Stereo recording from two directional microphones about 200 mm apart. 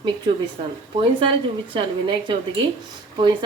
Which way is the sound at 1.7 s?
25° right (ahead or behind).